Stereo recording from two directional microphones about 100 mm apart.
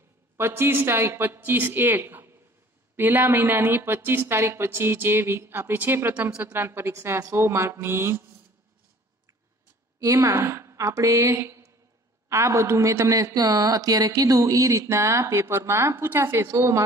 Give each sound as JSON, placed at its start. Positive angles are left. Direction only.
{"t": 0.4, "sound": "speech", "side_deg": -20}
{"t": 9.9, "sound": "a woman's voice", "side_deg": -35}